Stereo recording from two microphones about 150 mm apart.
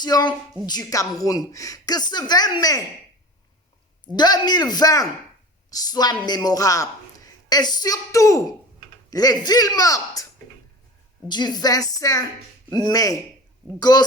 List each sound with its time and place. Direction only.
0.0 s a woman's voice: 25° left (ahead or behind)
4.0 s a woman's voice: 30° left (ahead or behind)
11.3 s a woman's voice: 30° left (ahead or behind)